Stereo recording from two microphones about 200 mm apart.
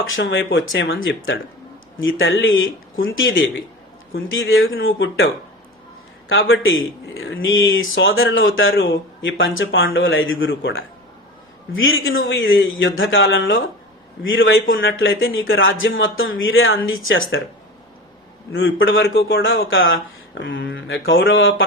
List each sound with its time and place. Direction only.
0.2 s a man's voice: 65° left (ahead or behind)
11.7 s a man's voice: 80° left
18.5 s a man's voice: 75° left (ahead or behind)